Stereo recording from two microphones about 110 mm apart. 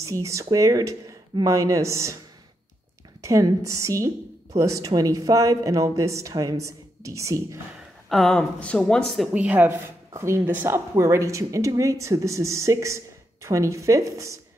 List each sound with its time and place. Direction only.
0.0 s speech: 30° right (ahead or behind)
3.2 s speech: 30° right (ahead or behind)
8.1 s speech: 5° left (ahead or behind)
9.3 s speech: 15° right (ahead or behind)